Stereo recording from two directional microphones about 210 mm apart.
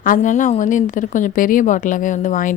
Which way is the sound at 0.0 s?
40° left (ahead or behind).